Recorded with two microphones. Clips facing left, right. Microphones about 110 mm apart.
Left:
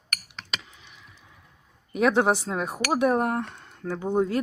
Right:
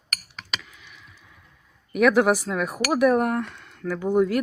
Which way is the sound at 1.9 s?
30° left (ahead or behind).